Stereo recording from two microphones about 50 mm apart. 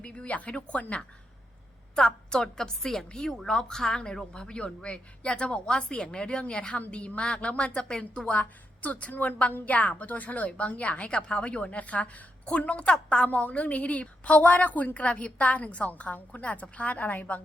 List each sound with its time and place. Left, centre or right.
0.0 s a woman's voice: left
2.0 s a woman's voice: centre; by 17.4 s left